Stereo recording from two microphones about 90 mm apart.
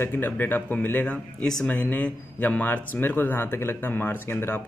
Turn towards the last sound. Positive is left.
turn(degrees=25)  # may be behind; listen again after turning